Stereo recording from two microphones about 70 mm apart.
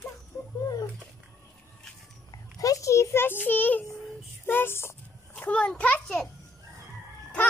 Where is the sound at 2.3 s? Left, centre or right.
Left.